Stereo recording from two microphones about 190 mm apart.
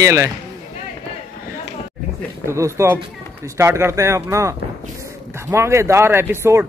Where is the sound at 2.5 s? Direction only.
15° right (ahead or behind).